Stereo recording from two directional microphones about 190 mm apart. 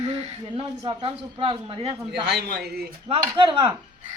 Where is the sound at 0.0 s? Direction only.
30° right (ahead or behind).